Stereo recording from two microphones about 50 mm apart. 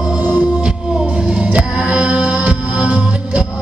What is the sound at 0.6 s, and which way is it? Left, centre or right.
Music, centre.